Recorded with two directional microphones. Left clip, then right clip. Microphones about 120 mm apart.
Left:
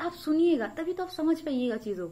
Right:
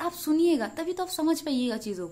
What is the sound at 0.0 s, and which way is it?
A woman's voice, 30° right (ahead or behind).